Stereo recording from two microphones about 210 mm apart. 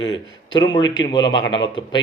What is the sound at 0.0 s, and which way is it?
Speech, 25° left (ahead or behind).